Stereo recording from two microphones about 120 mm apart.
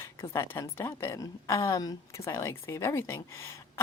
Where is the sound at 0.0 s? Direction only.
20° left (ahead or behind).